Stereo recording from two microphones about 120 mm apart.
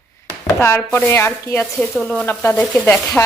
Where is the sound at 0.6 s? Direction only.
20° left (ahead or behind).